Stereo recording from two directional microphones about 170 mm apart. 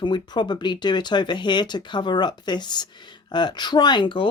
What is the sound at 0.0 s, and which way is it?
Speech, 25° left (ahead or behind).